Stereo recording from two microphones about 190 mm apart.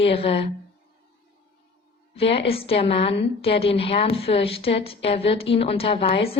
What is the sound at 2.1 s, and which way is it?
A woman's voice, 30° left (ahead or behind).